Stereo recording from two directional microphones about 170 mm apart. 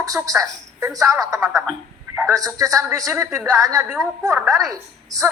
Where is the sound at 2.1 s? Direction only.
20° right (ahead or behind).